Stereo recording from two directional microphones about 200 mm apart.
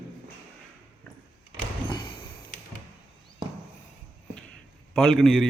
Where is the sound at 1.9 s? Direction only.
25° left (ahead or behind).